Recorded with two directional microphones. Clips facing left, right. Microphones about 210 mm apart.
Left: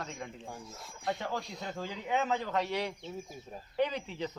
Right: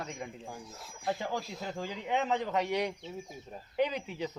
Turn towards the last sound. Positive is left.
turn(degrees=-10)  # may be behind; listen again after turning